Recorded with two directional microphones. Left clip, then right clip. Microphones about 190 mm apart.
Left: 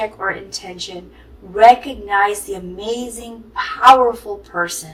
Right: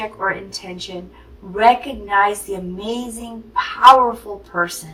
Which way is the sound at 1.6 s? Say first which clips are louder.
Left 4 dB; 30° left (ahead or behind).